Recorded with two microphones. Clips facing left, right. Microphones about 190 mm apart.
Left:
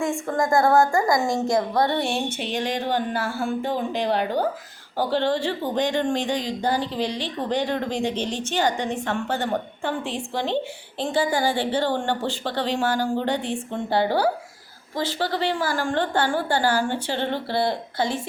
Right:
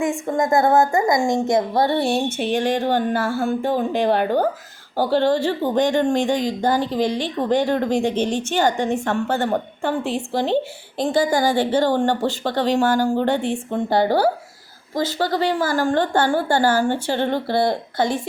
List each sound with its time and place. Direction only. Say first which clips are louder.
0.0 s a woman's voice: right 3 dB; 20° right (ahead or behind); by 18.2 s 50° right (ahead or behind)